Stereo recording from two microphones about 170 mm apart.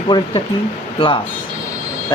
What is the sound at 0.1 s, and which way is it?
Speech, 25° left (ahead or behind).